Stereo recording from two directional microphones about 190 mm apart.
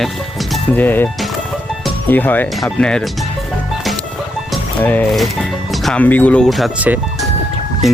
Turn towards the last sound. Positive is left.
turn(degrees=0)  # may be behind; listen again after turning